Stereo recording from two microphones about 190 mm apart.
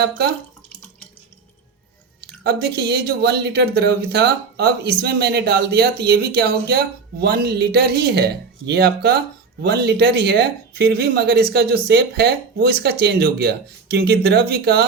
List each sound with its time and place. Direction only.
2.4 s speech: 60° right (ahead or behind)